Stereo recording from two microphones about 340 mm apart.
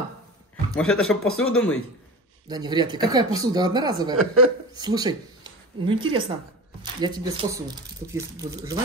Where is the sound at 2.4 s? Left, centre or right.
Centre.